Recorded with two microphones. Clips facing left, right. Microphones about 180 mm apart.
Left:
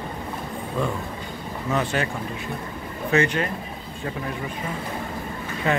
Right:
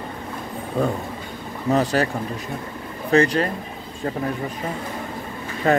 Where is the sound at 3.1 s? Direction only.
35° right (ahead or behind).